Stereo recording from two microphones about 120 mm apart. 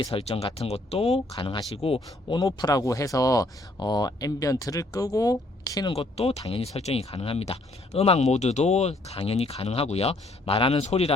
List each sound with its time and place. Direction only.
0.1 s speech: 55° left (ahead or behind)
2.3 s speech: 35° left (ahead or behind)
5.9 s speech: 55° left (ahead or behind)